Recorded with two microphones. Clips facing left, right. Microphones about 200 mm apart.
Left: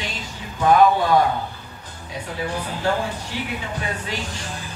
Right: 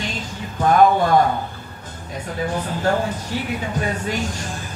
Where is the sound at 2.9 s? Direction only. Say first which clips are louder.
Right 3 dB; 45° right (ahead or behind).